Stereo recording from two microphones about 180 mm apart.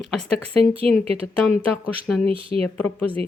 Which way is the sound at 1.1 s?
30° right (ahead or behind).